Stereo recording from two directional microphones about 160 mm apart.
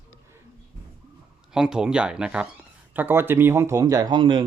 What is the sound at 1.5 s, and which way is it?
Speech, 5° right (ahead or behind).